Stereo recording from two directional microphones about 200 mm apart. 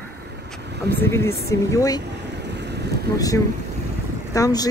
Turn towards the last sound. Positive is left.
turn(degrees=15)  # may be behind; listen again after turning